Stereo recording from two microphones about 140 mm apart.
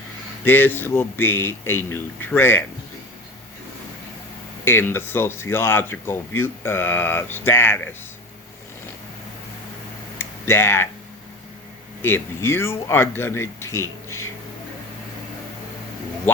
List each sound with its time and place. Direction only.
0.4 s speech: 15° left (ahead or behind)
4.6 s speech: 15° left (ahead or behind)
10.2 s a sound: 15° left (ahead or behind)
12.0 s speech: 15° left (ahead or behind)